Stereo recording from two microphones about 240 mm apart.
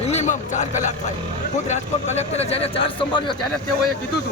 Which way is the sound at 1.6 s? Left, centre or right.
Left.